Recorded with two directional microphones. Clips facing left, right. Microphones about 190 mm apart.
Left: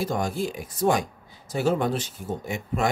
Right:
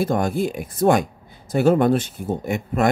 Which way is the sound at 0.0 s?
55° right (ahead or behind).